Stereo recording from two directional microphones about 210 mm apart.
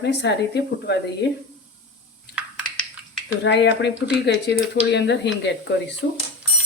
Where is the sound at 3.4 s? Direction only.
55° left (ahead or behind).